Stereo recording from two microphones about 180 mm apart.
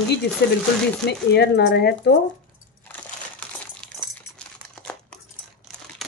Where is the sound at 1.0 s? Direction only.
65° left (ahead or behind).